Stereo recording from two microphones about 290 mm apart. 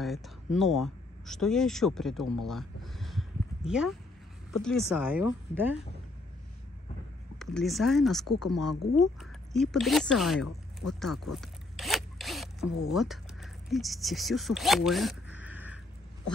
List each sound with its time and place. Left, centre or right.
0.0 s a sound: centre
0.6 s speech: centre
7.3 s speech: centre
11.0 s zipper: centre
12.6 s speech: left
12.9 s speech: centre